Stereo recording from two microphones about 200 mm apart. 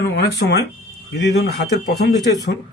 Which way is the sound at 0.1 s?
55° left (ahead or behind).